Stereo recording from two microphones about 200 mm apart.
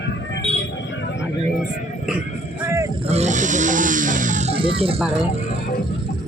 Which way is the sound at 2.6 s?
15° right (ahead or behind).